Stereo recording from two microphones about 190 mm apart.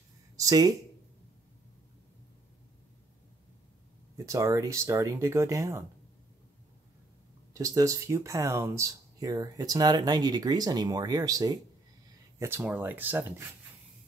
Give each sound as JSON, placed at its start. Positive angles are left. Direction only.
{"t": 0.4, "sound": "speech", "side_deg": -20}
{"t": 4.3, "sound": "speech", "side_deg": -15}
{"t": 7.5, "sound": "speech", "side_deg": -15}